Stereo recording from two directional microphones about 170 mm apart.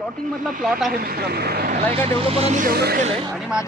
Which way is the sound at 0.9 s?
60° right (ahead or behind).